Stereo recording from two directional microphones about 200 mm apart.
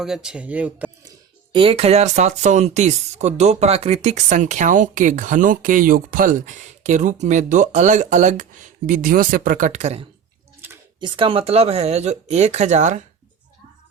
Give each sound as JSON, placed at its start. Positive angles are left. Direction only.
{"t": 0.0, "sound": "speech", "side_deg": 0}
{"t": 1.5, "sound": "speech", "side_deg": -30}